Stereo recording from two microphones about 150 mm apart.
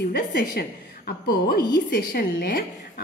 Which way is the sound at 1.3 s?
90° left.